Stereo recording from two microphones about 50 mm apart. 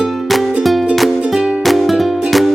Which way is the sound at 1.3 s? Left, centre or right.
Centre.